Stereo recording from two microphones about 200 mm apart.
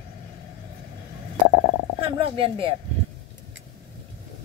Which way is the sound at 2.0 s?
25° right (ahead or behind).